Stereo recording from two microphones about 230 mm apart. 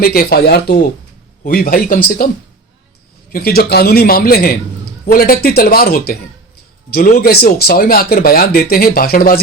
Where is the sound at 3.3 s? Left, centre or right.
Left.